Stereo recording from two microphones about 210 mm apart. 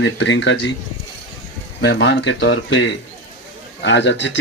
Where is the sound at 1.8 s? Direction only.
60° left (ahead or behind).